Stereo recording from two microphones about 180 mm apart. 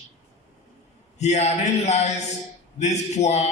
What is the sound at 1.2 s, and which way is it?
A man's voice, 35° left (ahead or behind).